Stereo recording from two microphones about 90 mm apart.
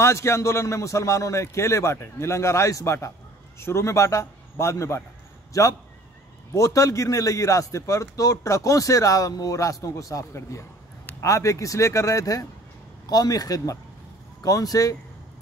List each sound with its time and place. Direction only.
0.0 s a man's voice: 30° left (ahead or behind)